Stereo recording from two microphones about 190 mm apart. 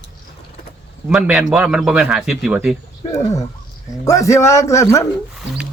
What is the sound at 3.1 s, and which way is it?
Speech, 15° left (ahead or behind).